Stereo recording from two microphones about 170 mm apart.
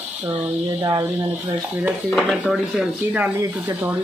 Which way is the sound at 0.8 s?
20° right (ahead or behind).